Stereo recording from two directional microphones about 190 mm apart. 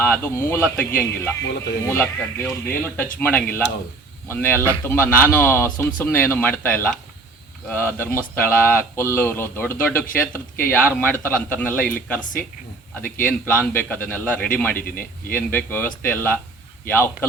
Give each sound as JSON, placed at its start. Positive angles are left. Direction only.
{"t": 0.0, "sound": "speech", "side_deg": 10}
{"t": 13.2, "sound": "speech", "side_deg": 10}